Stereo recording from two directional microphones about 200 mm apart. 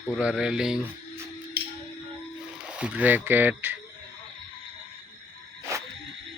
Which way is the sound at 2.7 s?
5° right (ahead or behind).